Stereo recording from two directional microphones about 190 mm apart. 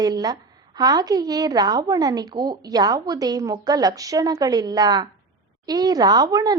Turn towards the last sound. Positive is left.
turn(degrees=-20)  # may be behind; listen again after turning